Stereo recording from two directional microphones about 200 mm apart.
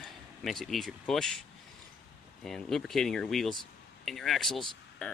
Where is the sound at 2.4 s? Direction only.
Centre (ahead or behind).